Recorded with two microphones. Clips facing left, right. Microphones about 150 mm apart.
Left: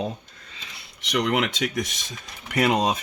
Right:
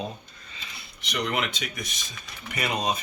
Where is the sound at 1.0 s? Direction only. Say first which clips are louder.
Left 5 dB; 90° left.